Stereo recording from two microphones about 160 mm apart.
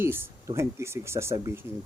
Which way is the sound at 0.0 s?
15° right (ahead or behind).